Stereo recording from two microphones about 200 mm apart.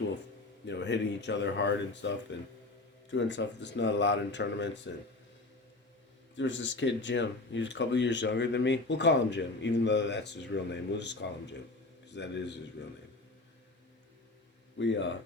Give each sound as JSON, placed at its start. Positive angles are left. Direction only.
{"t": 0.7, "sound": "speech", "side_deg": 60}
{"t": 6.3, "sound": "speech", "side_deg": 65}
{"t": 14.8, "sound": "speech", "side_deg": 65}